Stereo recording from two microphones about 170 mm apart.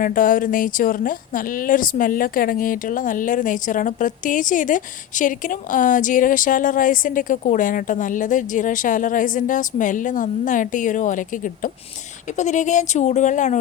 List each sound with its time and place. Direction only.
0.0 s a woman's voice: 55° left (ahead or behind)